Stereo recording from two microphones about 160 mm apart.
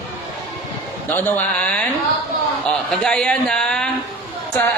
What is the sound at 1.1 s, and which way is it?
A man's voice, 10° left (ahead or behind).